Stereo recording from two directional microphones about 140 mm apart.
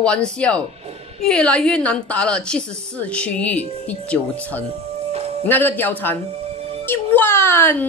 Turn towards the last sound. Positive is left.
turn(degrees=15)  # may be behind; listen again after turning